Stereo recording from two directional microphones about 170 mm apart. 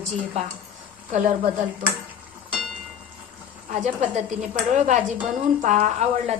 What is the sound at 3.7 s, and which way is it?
A woman's voice, 45° right (ahead or behind).